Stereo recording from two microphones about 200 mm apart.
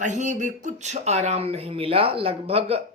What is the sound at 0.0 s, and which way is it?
Speech, 40° right (ahead or behind).